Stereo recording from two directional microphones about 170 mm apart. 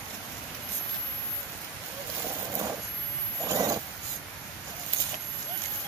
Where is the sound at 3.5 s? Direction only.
20° right (ahead or behind).